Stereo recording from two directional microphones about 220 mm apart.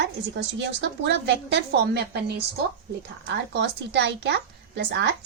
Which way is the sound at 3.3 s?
50° right (ahead or behind).